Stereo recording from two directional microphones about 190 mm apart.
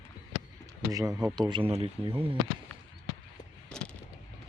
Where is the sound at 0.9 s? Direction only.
20° right (ahead or behind).